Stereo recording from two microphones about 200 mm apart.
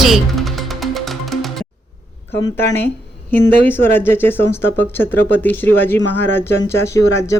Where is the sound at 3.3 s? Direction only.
10° left (ahead or behind).